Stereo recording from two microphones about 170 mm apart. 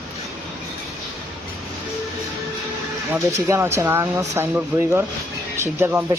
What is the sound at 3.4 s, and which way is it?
Speech, 15° right (ahead or behind).